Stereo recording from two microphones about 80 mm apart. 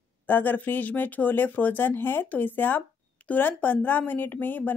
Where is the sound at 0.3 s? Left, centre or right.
Left.